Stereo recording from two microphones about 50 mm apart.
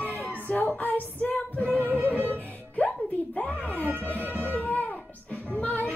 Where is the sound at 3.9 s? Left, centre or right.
Right.